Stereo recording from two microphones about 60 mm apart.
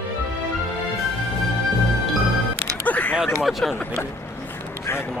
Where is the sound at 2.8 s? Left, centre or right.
Left.